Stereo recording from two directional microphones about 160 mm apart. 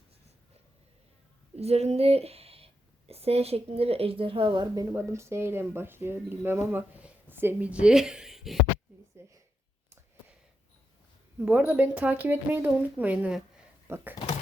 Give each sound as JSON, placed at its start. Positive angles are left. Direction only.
{"t": 1.5, "sound": "a woman's voice", "side_deg": -40}
{"t": 9.2, "sound": "speech", "side_deg": -15}
{"t": 11.3, "sound": "speech", "side_deg": -10}